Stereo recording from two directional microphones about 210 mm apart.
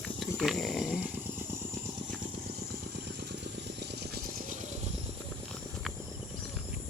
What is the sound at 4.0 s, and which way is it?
Rattle, 45° right (ahead or behind).